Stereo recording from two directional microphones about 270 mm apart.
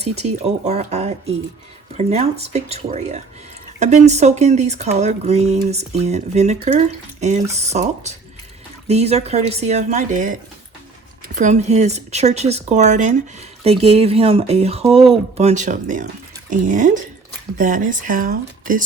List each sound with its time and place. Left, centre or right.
0.0 s speech: right
11.3 s speech: right